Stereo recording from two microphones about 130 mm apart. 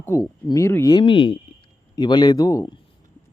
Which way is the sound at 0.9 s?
40° left (ahead or behind).